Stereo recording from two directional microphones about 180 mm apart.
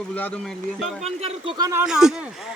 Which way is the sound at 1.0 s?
35° right (ahead or behind).